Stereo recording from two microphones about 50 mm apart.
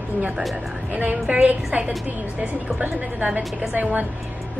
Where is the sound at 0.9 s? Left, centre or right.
Right.